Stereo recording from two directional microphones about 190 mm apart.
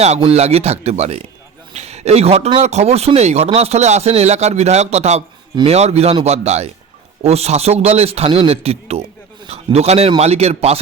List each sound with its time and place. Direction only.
0.0 s speech: 35° right (ahead or behind)